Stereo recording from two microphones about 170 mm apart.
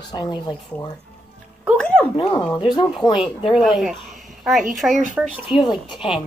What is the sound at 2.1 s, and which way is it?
Speech, 30° left (ahead or behind).